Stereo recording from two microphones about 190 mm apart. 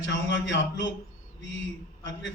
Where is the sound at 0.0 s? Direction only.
70° left (ahead or behind).